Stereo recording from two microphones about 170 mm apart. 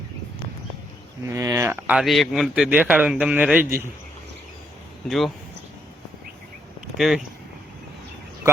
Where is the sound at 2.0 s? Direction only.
Centre (ahead or behind).